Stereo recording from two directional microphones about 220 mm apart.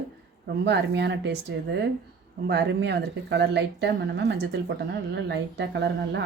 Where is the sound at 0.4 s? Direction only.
50° right (ahead or behind).